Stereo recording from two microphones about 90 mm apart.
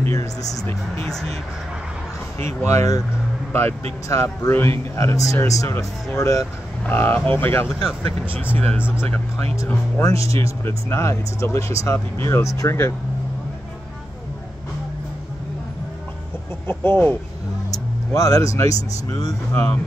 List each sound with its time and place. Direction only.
0.0 s a man's voice: 35° left (ahead or behind)
1.0 s speech: 5° left (ahead or behind)
2.3 s a man's voice: 35° left (ahead or behind)
6.8 s speech: 20° left (ahead or behind)
10.0 s a man's voice: 35° left (ahead or behind)
16.6 s speech: 25° left (ahead or behind)
17.6 s speech: 40° left (ahead or behind)